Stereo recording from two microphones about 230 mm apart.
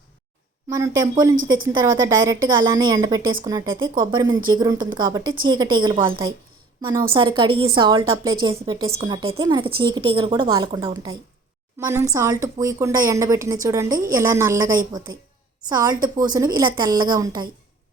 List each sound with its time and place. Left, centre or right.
0.7 s a woman's voice: centre